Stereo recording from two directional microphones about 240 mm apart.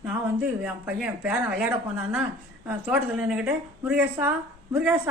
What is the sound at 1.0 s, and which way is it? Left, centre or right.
A woman's voice, centre.